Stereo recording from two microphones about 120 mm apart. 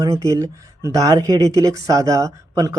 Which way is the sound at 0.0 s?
25° right (ahead or behind).